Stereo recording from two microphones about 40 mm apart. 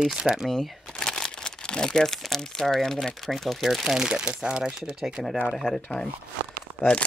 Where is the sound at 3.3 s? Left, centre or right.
Centre.